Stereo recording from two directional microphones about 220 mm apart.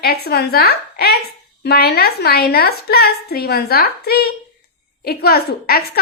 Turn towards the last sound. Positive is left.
turn(degrees=45)  # may be behind; listen again after turning